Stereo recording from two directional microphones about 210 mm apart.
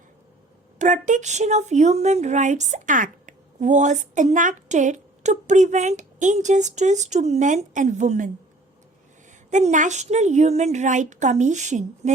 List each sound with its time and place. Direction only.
0.8 s a woman's voice: 35° right (ahead or behind)
9.5 s a woman's voice: 35° right (ahead or behind)